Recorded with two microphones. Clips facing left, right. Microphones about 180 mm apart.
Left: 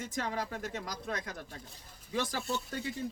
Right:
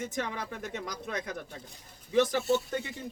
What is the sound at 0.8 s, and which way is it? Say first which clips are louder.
Speech: right 2 dB; 20° right (ahead or behind).